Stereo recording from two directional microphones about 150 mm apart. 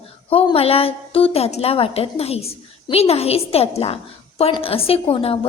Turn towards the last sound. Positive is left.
turn(degrees=40)  # may be behind; listen again after turning